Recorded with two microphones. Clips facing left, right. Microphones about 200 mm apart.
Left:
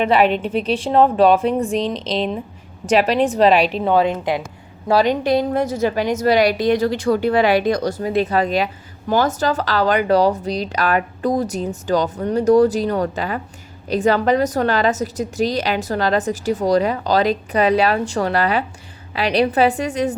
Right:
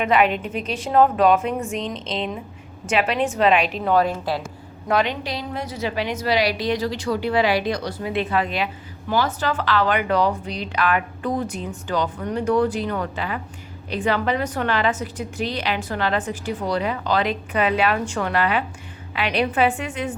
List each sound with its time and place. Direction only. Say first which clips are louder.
0.0 s a woman's voice: left 3 dB; 30° left (ahead or behind)
4.9 s a woman's voice: left 5 dB; 35° left (ahead or behind)
5.2 s a woman's voice: left 11 dB; 50° left (ahead or behind)